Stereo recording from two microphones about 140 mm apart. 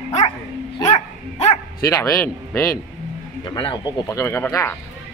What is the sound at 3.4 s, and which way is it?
Speech, 35° left (ahead or behind).